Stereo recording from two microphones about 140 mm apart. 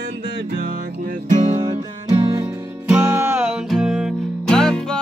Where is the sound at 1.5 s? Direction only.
35° right (ahead or behind).